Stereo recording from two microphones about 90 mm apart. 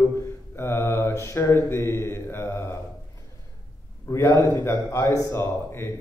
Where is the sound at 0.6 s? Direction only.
30° left (ahead or behind).